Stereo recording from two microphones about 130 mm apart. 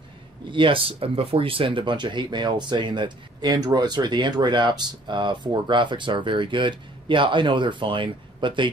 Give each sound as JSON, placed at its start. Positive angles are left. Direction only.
{"t": 0.5, "sound": "speech", "side_deg": -40}